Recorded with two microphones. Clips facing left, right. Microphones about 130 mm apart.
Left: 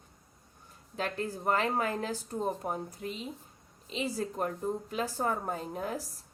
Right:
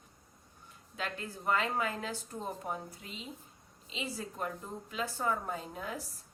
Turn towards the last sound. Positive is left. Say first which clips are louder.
# left 4 dB
turn(degrees=40)  # may be behind; listen again after turning